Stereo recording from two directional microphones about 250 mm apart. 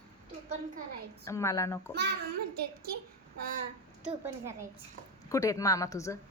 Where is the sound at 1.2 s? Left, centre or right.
Centre.